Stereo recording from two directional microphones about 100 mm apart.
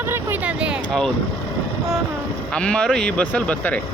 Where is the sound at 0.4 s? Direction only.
10° right (ahead or behind).